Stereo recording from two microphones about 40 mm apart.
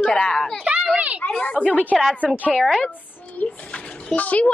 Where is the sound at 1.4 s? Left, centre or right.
Left.